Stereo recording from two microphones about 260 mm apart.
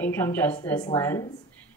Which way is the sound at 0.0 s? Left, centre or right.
Centre.